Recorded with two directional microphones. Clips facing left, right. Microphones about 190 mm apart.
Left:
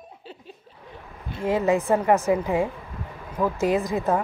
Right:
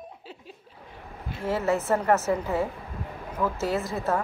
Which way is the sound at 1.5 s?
15° left (ahead or behind).